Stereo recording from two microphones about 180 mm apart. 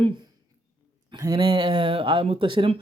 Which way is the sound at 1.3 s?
30° right (ahead or behind).